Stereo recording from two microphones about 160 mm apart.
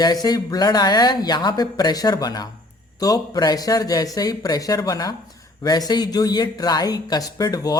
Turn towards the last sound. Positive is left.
turn(degrees=25)  # may be behind; listen again after turning